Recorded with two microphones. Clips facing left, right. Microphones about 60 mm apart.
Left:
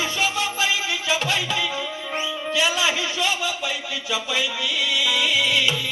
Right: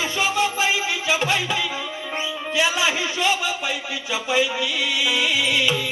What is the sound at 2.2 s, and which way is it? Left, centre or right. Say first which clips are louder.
Speech: right 1 dB; right.